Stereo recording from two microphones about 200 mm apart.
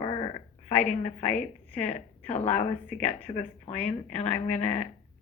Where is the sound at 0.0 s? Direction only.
25° left (ahead or behind).